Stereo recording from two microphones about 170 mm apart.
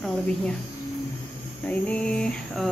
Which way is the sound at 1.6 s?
10° left (ahead or behind).